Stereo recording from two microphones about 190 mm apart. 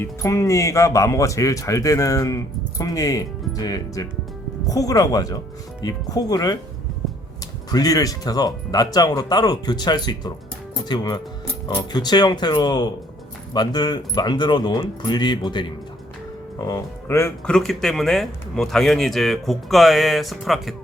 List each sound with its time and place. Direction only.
0.0 s speech: 15° left (ahead or behind)
7.7 s speech: 20° left (ahead or behind); by 20.7 s centre (ahead or behind)